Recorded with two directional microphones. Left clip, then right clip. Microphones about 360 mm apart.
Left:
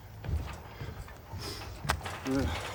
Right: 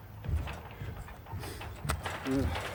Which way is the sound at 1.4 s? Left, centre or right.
Centre.